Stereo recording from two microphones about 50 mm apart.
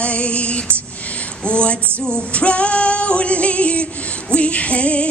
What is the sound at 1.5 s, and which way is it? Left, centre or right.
Female singing, left.